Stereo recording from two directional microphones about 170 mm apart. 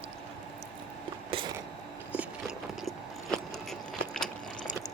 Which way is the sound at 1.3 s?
30° right (ahead or behind).